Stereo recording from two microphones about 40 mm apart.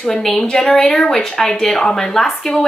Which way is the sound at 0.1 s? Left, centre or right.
Centre.